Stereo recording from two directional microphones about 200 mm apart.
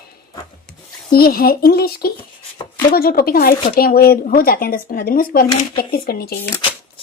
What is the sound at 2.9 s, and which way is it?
Speech, 45° left (ahead or behind).